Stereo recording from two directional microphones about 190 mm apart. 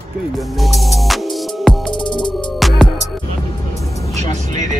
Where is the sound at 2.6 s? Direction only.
Centre (ahead or behind).